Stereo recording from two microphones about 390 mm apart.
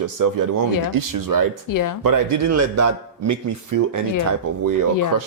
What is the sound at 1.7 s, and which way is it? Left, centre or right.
Speech, left.